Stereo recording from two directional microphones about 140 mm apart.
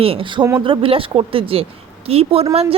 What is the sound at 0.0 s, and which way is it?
A woman's voice, 40° right (ahead or behind).